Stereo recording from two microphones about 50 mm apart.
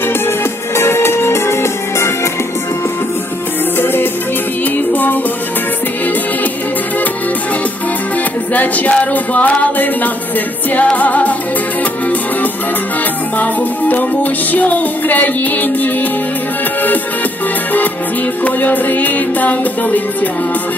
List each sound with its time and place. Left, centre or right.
0.8 s music: left
3.8 s music: left
8.5 s music: left
13.3 s music: left
18.4 s music: left